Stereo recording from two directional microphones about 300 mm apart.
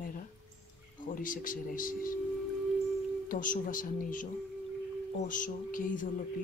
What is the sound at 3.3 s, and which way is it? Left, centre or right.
Speech, left.